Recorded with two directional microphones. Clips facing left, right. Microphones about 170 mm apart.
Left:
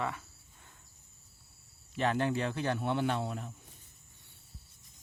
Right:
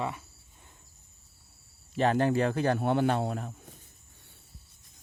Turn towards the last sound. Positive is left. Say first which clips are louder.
# right 5 dB
turn(degrees=-50)  # may be behind; listen again after turning